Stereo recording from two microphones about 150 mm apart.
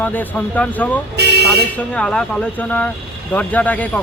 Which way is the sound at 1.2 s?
90° right.